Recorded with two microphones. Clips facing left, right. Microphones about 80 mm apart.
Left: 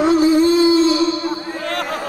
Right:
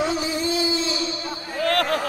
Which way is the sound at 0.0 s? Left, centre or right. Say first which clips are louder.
Left 11 dB; left.